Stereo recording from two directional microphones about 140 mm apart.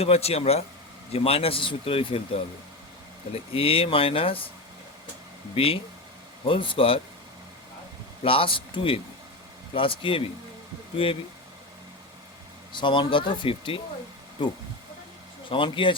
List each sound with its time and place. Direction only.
0.0 s speech: 45° left (ahead or behind)
5.5 s speech: 40° left (ahead or behind)
8.2 s speech: 40° left (ahead or behind)
12.7 s speech: 35° left (ahead or behind)
15.4 s speech: 40° left (ahead or behind)